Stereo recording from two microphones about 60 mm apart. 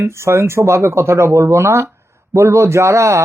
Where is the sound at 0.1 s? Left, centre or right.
Right.